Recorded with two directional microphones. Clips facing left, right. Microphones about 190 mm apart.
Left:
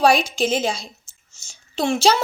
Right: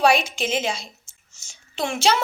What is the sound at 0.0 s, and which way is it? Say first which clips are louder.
Speech: left 2 dB; 35° left (ahead or behind).